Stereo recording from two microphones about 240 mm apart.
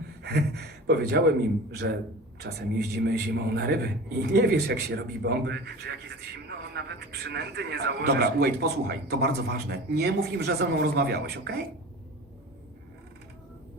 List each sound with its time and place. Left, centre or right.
0.2 s a man's voice: right